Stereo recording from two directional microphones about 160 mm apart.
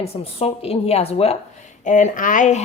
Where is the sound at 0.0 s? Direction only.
40° left (ahead or behind).